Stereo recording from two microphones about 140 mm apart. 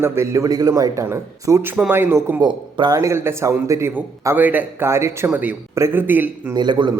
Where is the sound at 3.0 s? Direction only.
20° right (ahead or behind).